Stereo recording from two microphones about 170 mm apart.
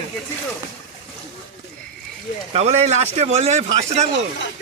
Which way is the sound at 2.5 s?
40° right (ahead or behind).